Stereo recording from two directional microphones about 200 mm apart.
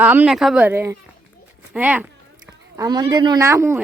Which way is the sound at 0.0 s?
10° right (ahead or behind).